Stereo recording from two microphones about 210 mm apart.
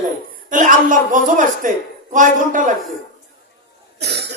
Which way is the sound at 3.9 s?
55° right (ahead or behind).